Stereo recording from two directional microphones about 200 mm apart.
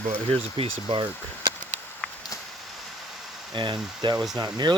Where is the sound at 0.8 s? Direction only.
25° right (ahead or behind).